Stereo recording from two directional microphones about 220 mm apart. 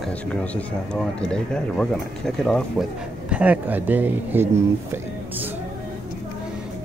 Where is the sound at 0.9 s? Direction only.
5° left (ahead or behind).